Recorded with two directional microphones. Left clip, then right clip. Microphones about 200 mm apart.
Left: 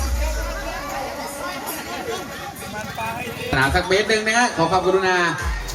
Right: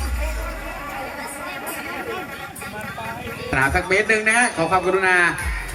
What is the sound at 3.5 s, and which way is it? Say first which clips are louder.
A man's voice: even; 5° right (ahead or behind).